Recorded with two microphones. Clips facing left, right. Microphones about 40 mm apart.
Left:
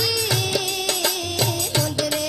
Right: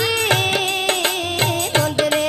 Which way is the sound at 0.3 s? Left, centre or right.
Right.